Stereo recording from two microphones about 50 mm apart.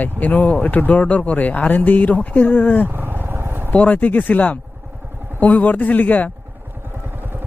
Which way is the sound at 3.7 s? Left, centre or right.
Left.